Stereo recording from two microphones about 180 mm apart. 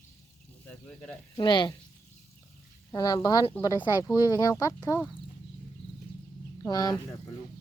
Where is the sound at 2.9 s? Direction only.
20° left (ahead or behind).